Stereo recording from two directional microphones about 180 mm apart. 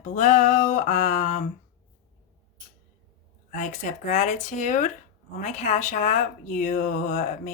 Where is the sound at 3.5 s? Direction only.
45° left (ahead or behind).